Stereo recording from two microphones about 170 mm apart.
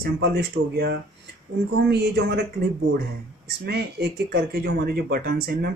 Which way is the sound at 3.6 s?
75° right (ahead or behind).